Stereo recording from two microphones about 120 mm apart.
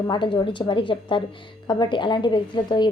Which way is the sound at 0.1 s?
40° left (ahead or behind).